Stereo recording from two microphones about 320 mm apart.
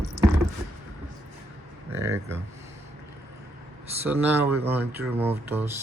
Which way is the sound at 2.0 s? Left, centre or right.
Centre.